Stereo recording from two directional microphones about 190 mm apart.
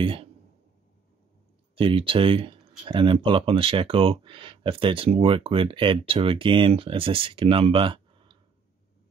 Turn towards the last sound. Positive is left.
turn(degrees=-25)  # may be behind; listen again after turning